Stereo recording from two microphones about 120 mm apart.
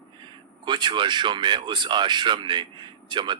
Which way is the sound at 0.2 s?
40° right (ahead or behind).